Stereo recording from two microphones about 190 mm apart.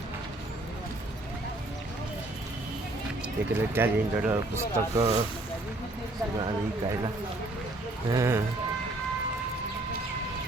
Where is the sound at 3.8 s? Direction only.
10° right (ahead or behind).